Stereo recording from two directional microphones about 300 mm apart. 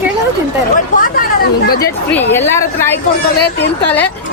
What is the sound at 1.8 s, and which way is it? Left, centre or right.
Speech, centre.